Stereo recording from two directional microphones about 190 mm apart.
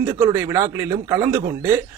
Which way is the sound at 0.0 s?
10° right (ahead or behind).